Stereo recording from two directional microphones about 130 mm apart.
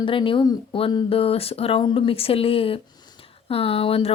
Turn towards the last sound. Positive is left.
turn(degrees=45)  # may be behind; listen again after turning